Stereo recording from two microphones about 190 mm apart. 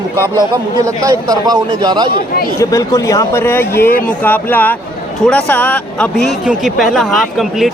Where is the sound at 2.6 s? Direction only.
15° left (ahead or behind).